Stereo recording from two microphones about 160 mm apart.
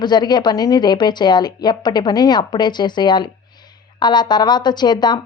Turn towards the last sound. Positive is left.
turn(degrees=25)  # may be behind; listen again after turning